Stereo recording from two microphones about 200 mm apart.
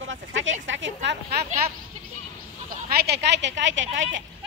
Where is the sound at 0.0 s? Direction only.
70° right (ahead or behind).